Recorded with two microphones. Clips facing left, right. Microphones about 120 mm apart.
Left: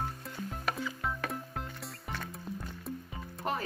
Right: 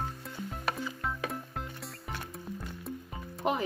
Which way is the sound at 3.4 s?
15° right (ahead or behind).